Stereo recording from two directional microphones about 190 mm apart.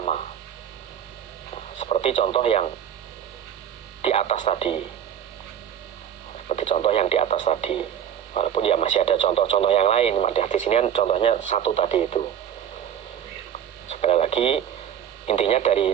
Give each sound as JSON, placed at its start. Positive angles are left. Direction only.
{"t": 1.8, "sound": "speech", "side_deg": 30}
{"t": 4.0, "sound": "speech", "side_deg": 35}
{"t": 6.5, "sound": "speech", "side_deg": 35}
{"t": 13.9, "sound": "radio", "side_deg": 30}
{"t": 15.3, "sound": "speech", "side_deg": 30}